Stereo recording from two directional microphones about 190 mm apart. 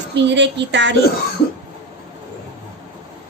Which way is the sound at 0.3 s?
70° right (ahead or behind).